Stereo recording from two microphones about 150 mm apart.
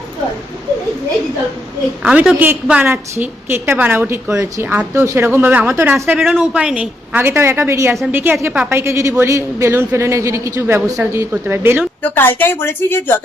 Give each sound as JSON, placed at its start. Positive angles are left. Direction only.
{"t": 2.0, "sound": "a woman's voice", "side_deg": -5}
{"t": 12.0, "sound": "a woman's voice", "side_deg": 15}